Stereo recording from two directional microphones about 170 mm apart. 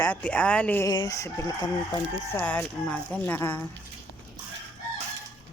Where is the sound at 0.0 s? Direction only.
10° left (ahead or behind).